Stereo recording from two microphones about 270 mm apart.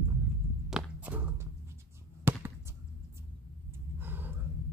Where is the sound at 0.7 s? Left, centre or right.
Centre.